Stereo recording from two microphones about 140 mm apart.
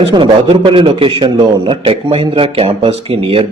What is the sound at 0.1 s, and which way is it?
A man's voice, 40° right (ahead or behind).